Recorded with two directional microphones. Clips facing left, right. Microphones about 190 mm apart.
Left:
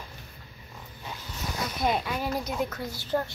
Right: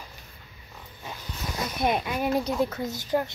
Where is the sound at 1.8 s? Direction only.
15° right (ahead or behind).